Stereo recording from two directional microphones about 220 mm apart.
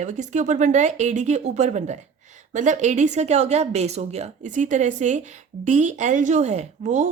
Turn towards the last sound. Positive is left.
turn(degrees=-30)  # may be behind; listen again after turning